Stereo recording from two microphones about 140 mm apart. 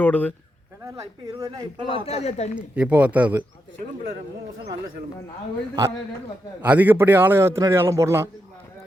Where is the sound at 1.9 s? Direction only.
50° left (ahead or behind).